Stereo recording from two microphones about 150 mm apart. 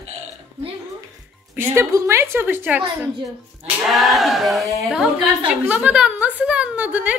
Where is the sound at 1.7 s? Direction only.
20° right (ahead or behind).